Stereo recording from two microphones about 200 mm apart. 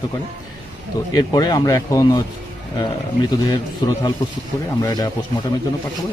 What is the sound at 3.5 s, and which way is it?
A man's voice, 20° left (ahead or behind).